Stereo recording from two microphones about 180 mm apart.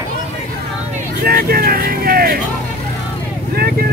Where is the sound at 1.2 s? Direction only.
55° right (ahead or behind).